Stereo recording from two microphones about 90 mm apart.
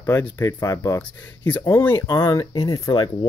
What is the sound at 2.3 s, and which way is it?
Speech, 40° left (ahead or behind).